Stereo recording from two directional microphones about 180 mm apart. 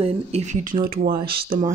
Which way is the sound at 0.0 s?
40° right (ahead or behind).